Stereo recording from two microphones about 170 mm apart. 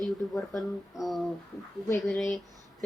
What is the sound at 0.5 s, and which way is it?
Speech, centre (ahead or behind).